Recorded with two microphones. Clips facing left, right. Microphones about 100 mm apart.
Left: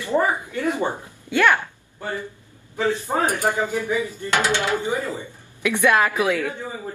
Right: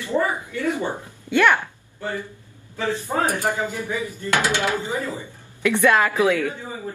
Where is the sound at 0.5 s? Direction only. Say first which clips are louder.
Left 1 dB; 20° left (ahead or behind).